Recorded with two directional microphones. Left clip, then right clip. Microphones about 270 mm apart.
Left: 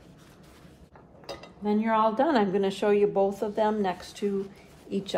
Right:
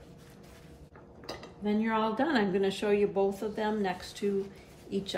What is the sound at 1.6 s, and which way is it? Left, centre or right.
Speech, centre.